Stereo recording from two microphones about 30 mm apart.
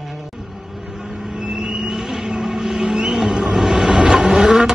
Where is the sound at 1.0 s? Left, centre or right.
Right.